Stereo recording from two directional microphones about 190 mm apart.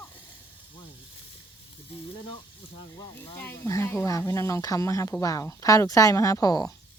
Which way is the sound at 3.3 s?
15° left (ahead or behind).